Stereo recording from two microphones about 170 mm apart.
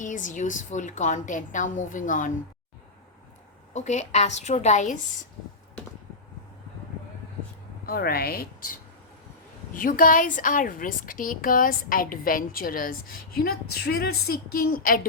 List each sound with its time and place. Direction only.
0.0 s a woman's voice: 50° left (ahead or behind)
3.8 s a woman's voice: 45° left (ahead or behind)
7.9 s a woman's voice: 65° left (ahead or behind)